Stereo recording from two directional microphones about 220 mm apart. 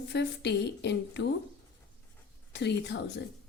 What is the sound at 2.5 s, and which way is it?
Speech, 50° left (ahead or behind).